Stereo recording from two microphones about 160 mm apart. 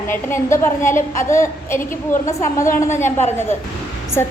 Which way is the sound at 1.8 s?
55° left (ahead or behind).